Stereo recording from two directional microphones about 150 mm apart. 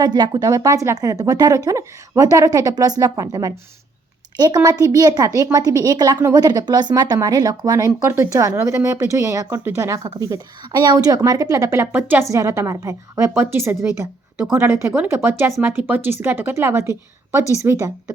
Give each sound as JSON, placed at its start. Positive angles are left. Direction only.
{"t": 0.0, "sound": "speech", "side_deg": -30}